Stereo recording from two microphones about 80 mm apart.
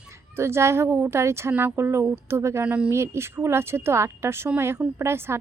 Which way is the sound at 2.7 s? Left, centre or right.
Centre.